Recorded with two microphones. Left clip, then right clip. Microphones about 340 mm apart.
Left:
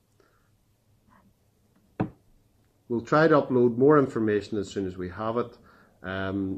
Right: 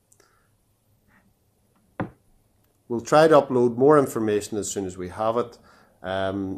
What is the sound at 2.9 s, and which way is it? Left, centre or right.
Speech, centre.